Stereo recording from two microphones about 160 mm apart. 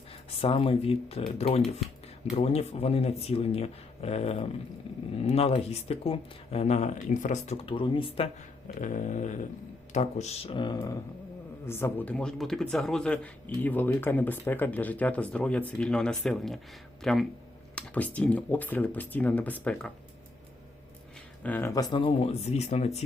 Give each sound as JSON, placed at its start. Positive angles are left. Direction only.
{"t": 0.3, "sound": "speech", "side_deg": 35}
{"t": 7.5, "sound": "speech", "side_deg": 35}
{"t": 8.7, "sound": "a sound", "side_deg": 50}
{"t": 9.9, "sound": "speech", "side_deg": 45}
{"t": 11.6, "sound": "speech", "side_deg": 15}
{"t": 21.4, "sound": "speech", "side_deg": 10}
{"t": 21.7, "sound": "speech", "side_deg": 25}